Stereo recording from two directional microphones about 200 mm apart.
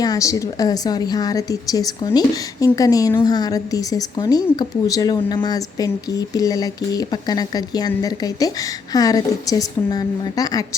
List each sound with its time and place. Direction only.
0.0 s a woman's voice: 15° left (ahead or behind)